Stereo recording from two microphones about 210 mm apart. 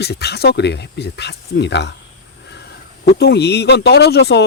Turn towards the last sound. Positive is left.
turn(degrees=50)  # may be behind; listen again after turning